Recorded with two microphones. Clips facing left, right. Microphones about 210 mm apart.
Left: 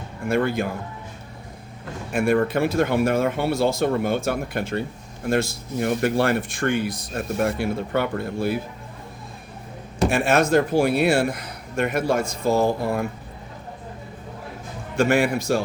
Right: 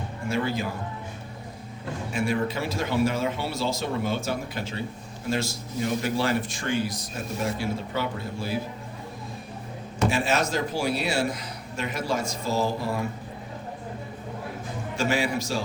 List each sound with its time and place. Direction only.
0.3 s speech: 55° left (ahead or behind)
2.1 s speech: 55° left (ahead or behind)
10.1 s speech: 55° left (ahead or behind)
14.9 s speech: 55° left (ahead or behind)